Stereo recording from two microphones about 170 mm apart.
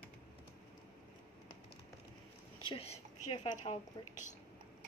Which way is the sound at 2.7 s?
30° left (ahead or behind).